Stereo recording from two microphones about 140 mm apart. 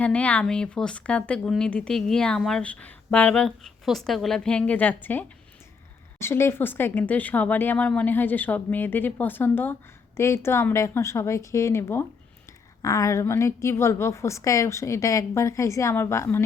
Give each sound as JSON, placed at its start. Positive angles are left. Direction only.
{"t": 0.0, "sound": "a woman's voice", "side_deg": 10}